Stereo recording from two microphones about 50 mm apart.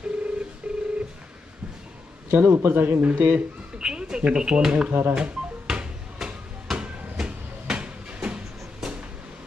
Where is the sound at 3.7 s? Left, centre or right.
Centre.